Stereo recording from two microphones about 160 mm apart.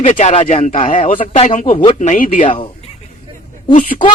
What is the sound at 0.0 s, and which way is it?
Speech, 50° left (ahead or behind).